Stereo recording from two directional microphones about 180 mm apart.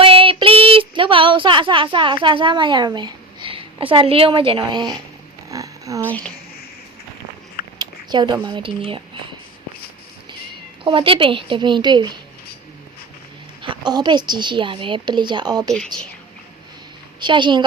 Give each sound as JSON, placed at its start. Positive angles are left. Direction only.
{"t": 0.0, "sound": "speech", "side_deg": -30}
{"t": 5.5, "sound": "a sound", "side_deg": -20}
{"t": 6.1, "sound": "speech", "side_deg": 10}
{"t": 7.8, "sound": "speech", "side_deg": -25}
{"t": 10.8, "sound": "a woman's voice", "side_deg": -30}
{"t": 13.6, "sound": "a woman's voice", "side_deg": -25}
{"t": 17.2, "sound": "a woman's voice", "side_deg": -25}